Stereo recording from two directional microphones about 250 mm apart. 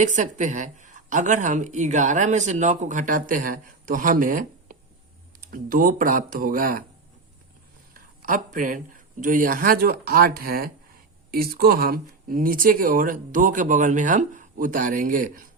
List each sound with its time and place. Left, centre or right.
0.0 s speech: right
7.9 s a sound: right
9.2 s speech: right